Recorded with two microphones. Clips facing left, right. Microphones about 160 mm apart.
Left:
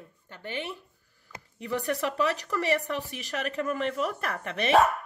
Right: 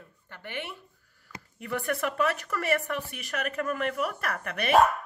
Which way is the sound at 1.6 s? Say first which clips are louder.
Left 2 dB; 25° left (ahead or behind).